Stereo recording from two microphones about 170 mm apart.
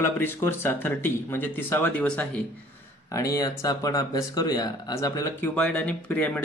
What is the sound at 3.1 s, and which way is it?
Speech, 20° left (ahead or behind).